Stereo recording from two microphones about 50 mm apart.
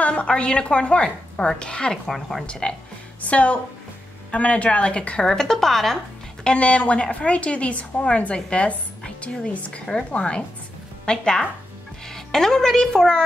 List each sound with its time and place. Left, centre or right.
0.0 s a woman's voice: left
2.0 s speech: centre
2.4 s a woman's voice: centre
6.4 s a woman's voice: left